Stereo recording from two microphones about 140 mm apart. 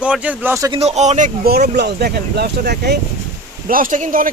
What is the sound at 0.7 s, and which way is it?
Speech, 50° right (ahead or behind).